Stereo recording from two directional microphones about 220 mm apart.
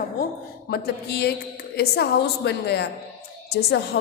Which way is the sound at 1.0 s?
45° left (ahead or behind).